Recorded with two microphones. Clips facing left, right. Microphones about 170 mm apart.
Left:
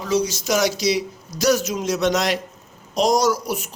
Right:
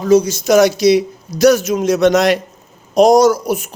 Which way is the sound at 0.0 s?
50° right (ahead or behind).